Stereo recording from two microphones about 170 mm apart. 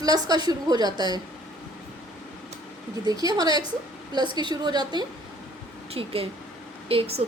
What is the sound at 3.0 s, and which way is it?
A woman's voice, 20° right (ahead or behind).